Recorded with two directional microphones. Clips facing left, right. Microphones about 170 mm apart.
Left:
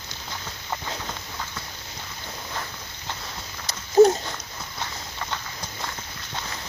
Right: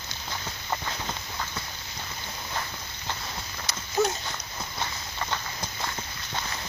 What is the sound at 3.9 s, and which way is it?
Dog, 35° left (ahead or behind).